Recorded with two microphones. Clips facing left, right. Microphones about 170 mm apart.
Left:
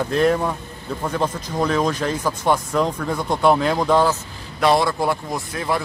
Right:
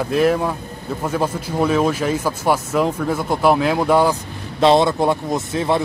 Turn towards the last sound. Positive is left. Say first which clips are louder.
# right 5 dB
turn(degrees=-25)  # may be behind; listen again after turning